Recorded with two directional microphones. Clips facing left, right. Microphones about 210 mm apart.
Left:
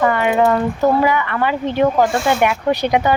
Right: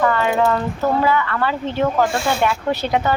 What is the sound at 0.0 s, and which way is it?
Speech, 15° left (ahead or behind).